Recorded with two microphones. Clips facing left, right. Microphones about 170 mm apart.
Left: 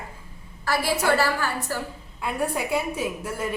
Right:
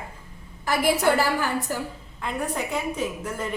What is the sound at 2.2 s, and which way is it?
Speech, 10° left (ahead or behind).